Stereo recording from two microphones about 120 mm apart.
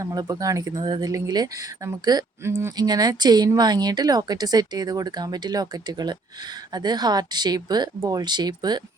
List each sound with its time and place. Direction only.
0.0 s speech: 30° right (ahead or behind)
2.7 s speech: 35° right (ahead or behind)